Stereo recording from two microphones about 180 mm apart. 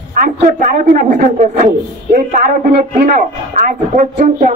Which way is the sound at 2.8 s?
45° right (ahead or behind).